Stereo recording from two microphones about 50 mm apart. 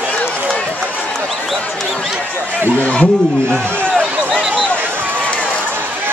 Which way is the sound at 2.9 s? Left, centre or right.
Centre.